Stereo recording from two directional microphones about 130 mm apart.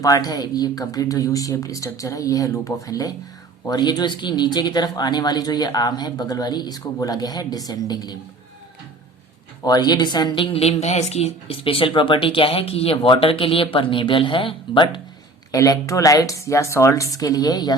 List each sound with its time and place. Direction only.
0.0 s speech: 30° left (ahead or behind)
9.6 s a woman's voice: 30° left (ahead or behind)
15.5 s speech: 25° left (ahead or behind)